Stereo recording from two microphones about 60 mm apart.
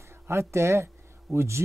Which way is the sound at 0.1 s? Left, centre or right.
Right.